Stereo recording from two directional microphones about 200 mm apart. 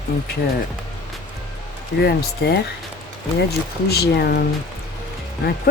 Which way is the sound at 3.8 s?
55° left (ahead or behind).